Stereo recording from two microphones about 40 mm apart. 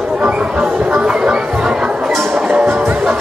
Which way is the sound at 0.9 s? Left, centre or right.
Right.